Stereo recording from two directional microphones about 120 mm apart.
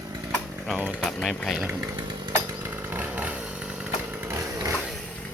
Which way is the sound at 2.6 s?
15° right (ahead or behind).